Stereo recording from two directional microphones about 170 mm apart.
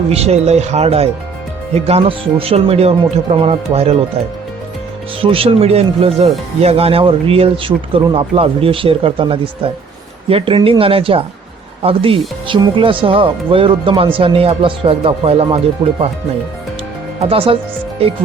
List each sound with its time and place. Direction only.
0.1 s speech: 40° right (ahead or behind)
5.2 s speech: 35° right (ahead or behind)
17.2 s speech: 35° right (ahead or behind)